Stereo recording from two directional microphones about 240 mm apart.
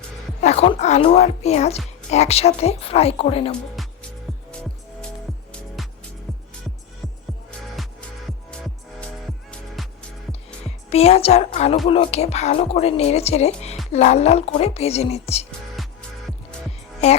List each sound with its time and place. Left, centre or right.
0.4 s speech: left
3.8 s music: centre
4.9 s music: centre
8.4 s music: centre
10.8 s speech: left
15.7 s music: centre